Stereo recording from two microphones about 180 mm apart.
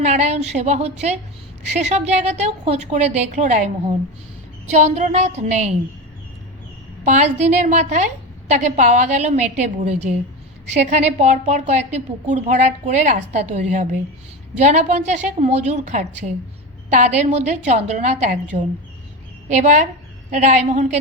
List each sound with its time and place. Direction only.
0.0 s a woman's voice: 40° right (ahead or behind)
7.0 s a woman's voice: 40° right (ahead or behind)
19.5 s a woman's voice: 40° right (ahead or behind)